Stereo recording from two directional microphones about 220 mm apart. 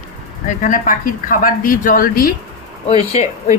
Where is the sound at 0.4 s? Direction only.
35° left (ahead or behind).